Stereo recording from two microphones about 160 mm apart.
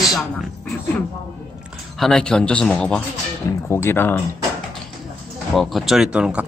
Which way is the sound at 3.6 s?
15° left (ahead or behind).